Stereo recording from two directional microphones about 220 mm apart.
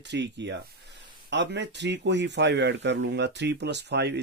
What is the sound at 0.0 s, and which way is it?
Speech, 50° right (ahead or behind).